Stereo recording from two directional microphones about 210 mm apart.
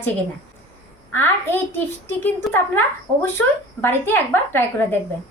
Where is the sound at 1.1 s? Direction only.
10° left (ahead or behind).